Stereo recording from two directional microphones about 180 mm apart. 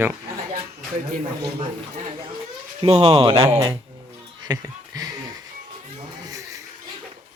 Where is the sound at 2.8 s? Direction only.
35° right (ahead or behind).